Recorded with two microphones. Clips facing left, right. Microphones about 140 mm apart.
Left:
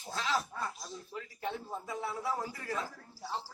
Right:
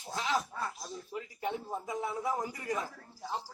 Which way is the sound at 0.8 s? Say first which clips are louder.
Right 3 dB; 15° right (ahead or behind).